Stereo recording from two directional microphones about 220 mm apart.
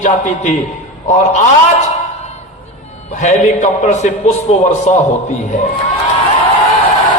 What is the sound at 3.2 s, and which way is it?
A man's voice, 35° left (ahead or behind).